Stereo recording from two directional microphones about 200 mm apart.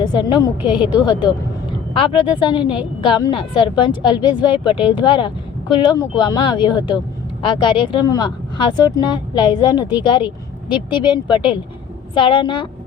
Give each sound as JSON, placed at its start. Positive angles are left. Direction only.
{"t": 0.0, "sound": "speech", "side_deg": 20}
{"t": 1.9, "sound": "speech", "side_deg": 25}